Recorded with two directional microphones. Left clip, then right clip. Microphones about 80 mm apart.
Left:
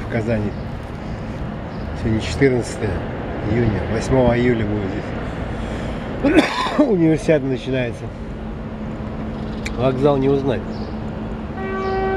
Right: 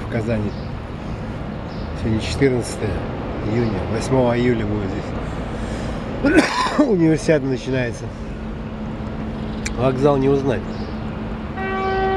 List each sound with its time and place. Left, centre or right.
0.1 s speech: centre
2.0 s speech: centre
6.2 s speech: centre
9.8 s speech: centre
11.6 s vehicle: right